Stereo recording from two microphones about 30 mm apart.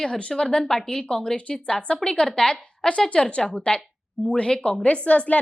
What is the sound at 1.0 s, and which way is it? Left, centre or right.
A woman's voice, left.